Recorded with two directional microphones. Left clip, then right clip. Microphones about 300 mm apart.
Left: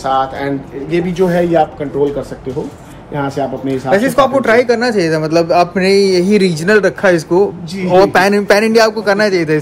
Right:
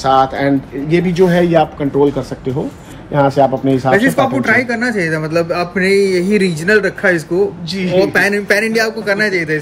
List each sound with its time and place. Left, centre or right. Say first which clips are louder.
0.0 s a man's voice: right 3 dB; right
3.2 s speech: right 6 dB; centre
4.4 s a man's voice: left 3 dB; centre